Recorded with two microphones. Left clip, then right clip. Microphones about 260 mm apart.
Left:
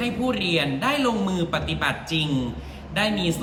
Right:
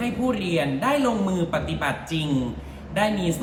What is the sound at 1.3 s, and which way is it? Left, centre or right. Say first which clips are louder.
A man's voice: even; centre.